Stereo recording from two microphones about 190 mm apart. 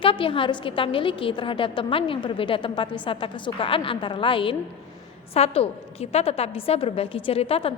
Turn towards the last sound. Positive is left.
turn(degrees=30)  # may be behind; listen again after turning